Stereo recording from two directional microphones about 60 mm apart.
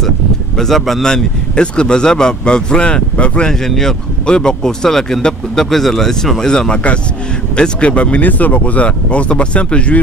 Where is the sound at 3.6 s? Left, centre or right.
Centre.